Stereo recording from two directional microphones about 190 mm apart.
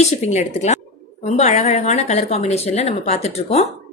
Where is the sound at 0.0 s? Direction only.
35° left (ahead or behind).